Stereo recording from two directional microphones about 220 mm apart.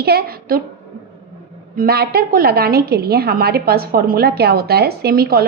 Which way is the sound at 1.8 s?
45° right (ahead or behind).